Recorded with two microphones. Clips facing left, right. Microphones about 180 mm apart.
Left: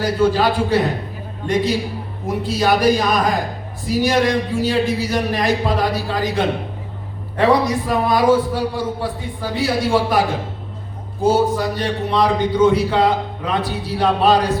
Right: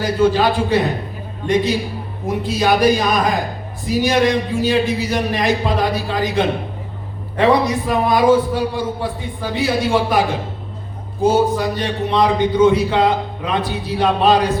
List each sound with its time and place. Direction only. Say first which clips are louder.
0.0 s a man's voice: right 1 dB; 20° right (ahead or behind)
2.2 s a man's voice: right 1 dB; 20° right (ahead or behind)